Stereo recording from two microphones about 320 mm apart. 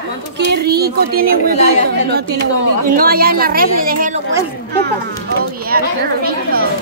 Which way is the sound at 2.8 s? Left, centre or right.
Right.